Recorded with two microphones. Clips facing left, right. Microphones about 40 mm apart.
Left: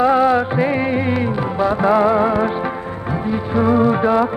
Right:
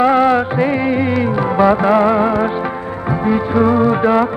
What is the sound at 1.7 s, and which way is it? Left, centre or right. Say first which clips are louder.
Music: right 2 dB; centre.